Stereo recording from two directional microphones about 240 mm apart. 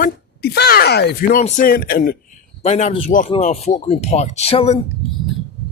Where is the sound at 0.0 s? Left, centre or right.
Left.